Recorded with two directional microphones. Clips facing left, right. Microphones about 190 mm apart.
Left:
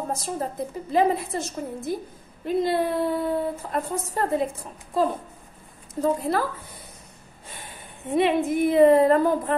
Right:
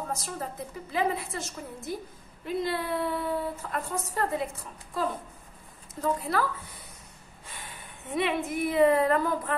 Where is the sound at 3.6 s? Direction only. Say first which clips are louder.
Left 5 dB; 30° left (ahead or behind).